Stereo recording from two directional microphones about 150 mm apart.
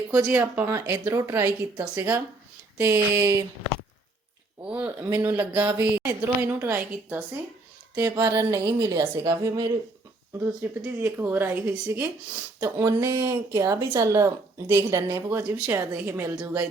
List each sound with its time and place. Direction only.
0.3 s a woman's voice: 10° right (ahead or behind)
4.6 s a woman's voice: 10° right (ahead or behind)
5.0 s a woman's voice: 20° right (ahead or behind)
5.3 s a woman's voice: 10° right (ahead or behind)
13.1 s a woman's voice: 30° right (ahead or behind)
13.5 s a woman's voice: 20° right (ahead or behind)